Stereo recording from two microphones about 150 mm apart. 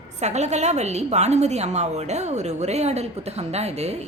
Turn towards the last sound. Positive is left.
turn(degrees=-45)  # may be behind; listen again after turning